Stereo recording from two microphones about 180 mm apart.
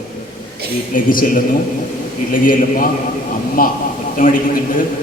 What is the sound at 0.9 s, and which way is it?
Speech, 50° left (ahead or behind).